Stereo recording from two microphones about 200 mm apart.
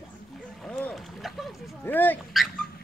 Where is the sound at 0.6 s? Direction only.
5° left (ahead or behind).